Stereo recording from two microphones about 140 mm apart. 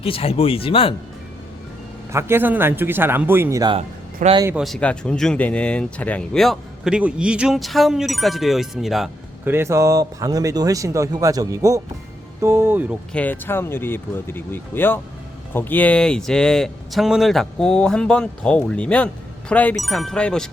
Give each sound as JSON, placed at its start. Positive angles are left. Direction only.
{"t": 0.0, "sound": "speech", "side_deg": 40}
{"t": 2.1, "sound": "speech", "side_deg": -15}
{"t": 3.8, "sound": "speech", "side_deg": -50}
{"t": 4.5, "sound": "speech", "side_deg": 0}
{"t": 9.4, "sound": "speech", "side_deg": -15}
{"t": 13.1, "sound": "speech", "side_deg": 15}